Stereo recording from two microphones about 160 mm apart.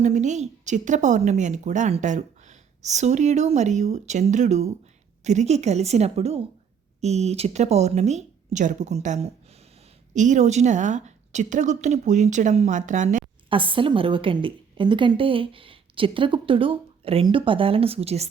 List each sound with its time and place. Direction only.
0.0 s a woman's voice: 45° right (ahead or behind)
13.5 s a woman's voice: 30° right (ahead or behind)